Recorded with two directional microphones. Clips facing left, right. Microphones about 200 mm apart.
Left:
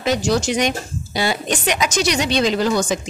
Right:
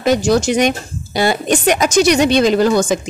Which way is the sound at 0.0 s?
50° right (ahead or behind).